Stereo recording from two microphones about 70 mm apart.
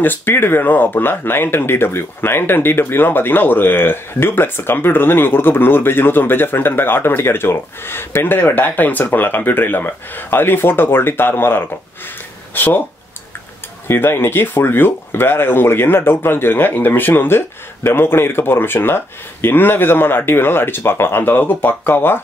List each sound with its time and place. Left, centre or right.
0.0 s speech: left
13.8 s speech: left